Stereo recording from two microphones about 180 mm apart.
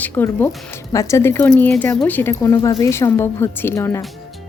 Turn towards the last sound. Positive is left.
turn(degrees=15)  # may be behind; listen again after turning